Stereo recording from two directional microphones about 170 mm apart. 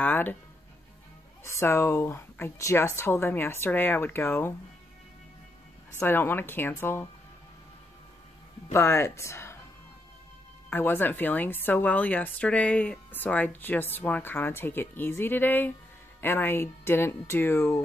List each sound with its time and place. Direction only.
0.0 s speech: 10° left (ahead or behind)
1.4 s a woman's voice: 15° left (ahead or behind)
5.9 s a woman's voice: 10° left (ahead or behind)
8.7 s a woman's voice: 15° left (ahead or behind)
10.7 s a woman's voice: 10° left (ahead or behind)